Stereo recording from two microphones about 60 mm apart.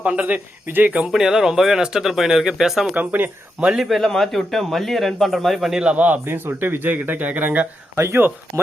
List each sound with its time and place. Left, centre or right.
0.0 s speech: right
1.0 s speech: centre
2.9 s speech: right
3.8 s speech: centre
5.8 s speech: right
6.2 s speech: right
7.9 s speech: right